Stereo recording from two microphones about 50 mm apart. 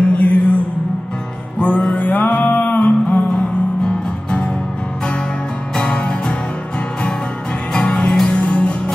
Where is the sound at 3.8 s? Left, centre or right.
Centre.